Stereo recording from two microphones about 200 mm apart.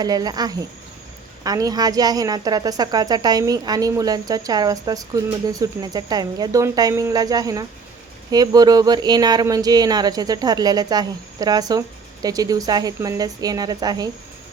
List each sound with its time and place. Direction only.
0.0 s a woman's voice: 20° right (ahead or behind)